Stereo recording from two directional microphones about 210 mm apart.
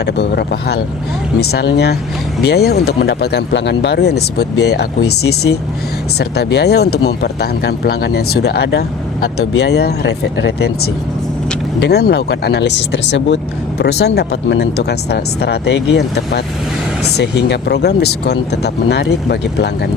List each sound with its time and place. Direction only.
0.0 s speech: 55° left (ahead or behind)
5.0 s speech: 90° left
6.1 s speech: 50° left (ahead or behind)
11.8 s speech: 50° left (ahead or behind)